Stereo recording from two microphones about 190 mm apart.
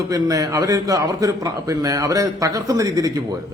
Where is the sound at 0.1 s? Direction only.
20° right (ahead or behind).